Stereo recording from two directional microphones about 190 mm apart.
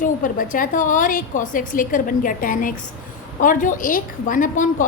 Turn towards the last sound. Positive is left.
turn(degrees=45)  # may be behind; listen again after turning